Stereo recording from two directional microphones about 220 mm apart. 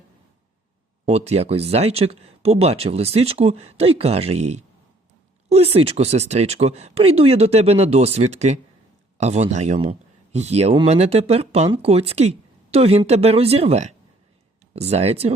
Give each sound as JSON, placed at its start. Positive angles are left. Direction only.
{"t": 1.0, "sound": "speech", "side_deg": -30}